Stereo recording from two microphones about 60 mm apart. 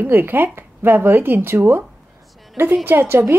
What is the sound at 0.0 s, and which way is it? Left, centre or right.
A woman's voice, right.